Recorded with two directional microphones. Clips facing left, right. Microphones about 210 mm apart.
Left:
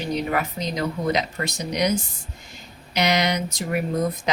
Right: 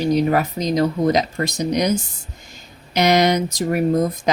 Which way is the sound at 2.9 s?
45° right (ahead or behind).